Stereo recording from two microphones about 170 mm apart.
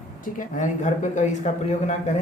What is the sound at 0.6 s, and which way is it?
Speech, 45° left (ahead or behind).